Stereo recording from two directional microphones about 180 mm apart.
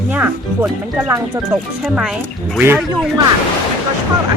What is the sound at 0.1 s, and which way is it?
Speech, 10° right (ahead or behind).